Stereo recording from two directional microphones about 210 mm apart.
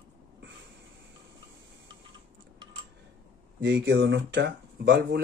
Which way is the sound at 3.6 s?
55° right (ahead or behind).